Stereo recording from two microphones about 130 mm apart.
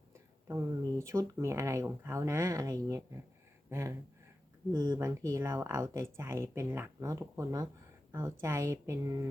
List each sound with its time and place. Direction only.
0.4 s speech: 20° right (ahead or behind)